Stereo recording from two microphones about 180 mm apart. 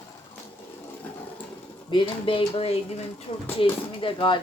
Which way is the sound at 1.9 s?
30° left (ahead or behind).